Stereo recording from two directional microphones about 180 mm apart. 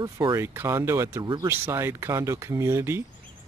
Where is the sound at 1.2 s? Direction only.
25° right (ahead or behind).